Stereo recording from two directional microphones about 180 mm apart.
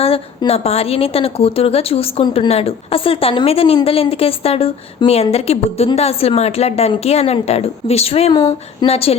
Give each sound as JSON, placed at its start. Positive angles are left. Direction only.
{"t": 0.0, "sound": "a woman's voice", "side_deg": 35}